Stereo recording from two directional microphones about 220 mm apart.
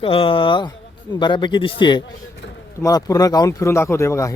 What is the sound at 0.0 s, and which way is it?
Speech, 25° left (ahead or behind).